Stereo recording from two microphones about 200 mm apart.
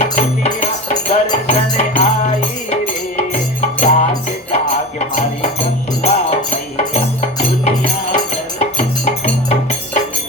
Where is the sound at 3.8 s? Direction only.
35° left (ahead or behind).